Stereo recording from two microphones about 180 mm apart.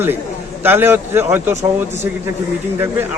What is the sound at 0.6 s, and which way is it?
Speech, 10° right (ahead or behind).